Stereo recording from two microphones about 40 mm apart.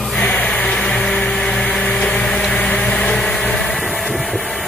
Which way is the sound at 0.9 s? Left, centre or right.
Left.